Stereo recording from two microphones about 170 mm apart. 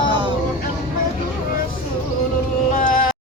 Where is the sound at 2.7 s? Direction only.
50° left (ahead or behind).